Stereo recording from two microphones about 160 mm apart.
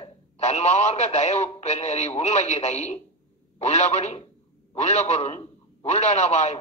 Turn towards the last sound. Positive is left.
turn(degrees=45)  # may be behind; listen again after turning